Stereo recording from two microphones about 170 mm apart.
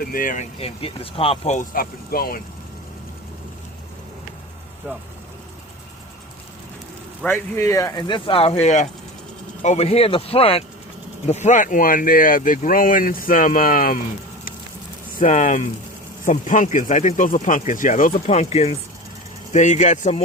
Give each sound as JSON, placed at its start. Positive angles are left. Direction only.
{"t": 0.0, "sound": "speech", "side_deg": 55}
{"t": 0.6, "sound": "speech", "side_deg": 35}
{"t": 4.9, "sound": "speech", "side_deg": -10}
{"t": 7.2, "sound": "speech", "side_deg": 15}
{"t": 15.2, "sound": "speech", "side_deg": 45}